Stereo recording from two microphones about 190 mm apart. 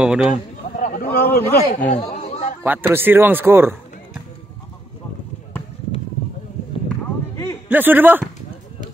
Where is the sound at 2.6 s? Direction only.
10° right (ahead or behind).